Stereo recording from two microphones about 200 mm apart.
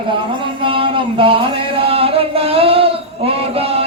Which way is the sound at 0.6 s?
25° right (ahead or behind).